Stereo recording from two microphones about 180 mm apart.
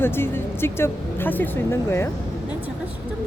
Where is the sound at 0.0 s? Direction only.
15° left (ahead or behind).